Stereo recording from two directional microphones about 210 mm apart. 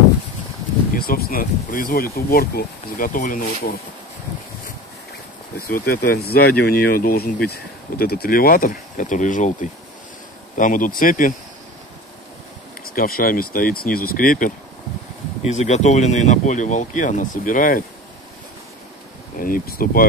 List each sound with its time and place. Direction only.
0.9 s speech: 45° left (ahead or behind)
5.9 s speech: 45° left (ahead or behind)
12.8 s speech: 45° left (ahead or behind)
19.4 s speech: 45° left (ahead or behind)